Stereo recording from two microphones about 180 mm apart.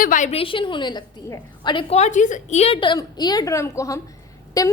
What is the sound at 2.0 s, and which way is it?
A woman's voice, 45° left (ahead or behind).